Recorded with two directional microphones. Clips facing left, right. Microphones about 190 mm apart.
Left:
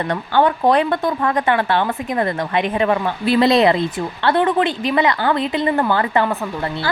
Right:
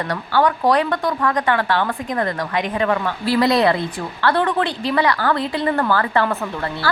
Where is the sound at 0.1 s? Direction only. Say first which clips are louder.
Left 2 dB; 25° left (ahead or behind).